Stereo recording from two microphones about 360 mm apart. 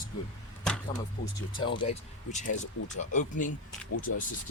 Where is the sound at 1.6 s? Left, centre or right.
Centre.